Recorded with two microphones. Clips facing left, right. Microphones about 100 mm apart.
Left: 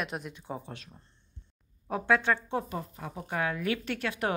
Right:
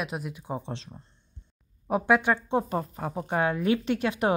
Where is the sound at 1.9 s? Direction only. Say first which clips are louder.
Right 4 dB; 15° right (ahead or behind).